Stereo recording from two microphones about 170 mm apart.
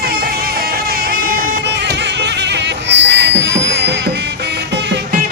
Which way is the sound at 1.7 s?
90° right.